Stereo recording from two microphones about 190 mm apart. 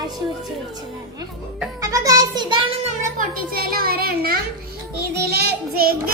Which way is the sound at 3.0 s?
50° right (ahead or behind).